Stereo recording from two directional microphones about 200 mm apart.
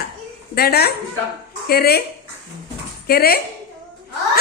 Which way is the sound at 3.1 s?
50° left (ahead or behind).